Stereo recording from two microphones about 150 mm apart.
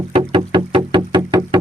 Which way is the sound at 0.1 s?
35° right (ahead or behind).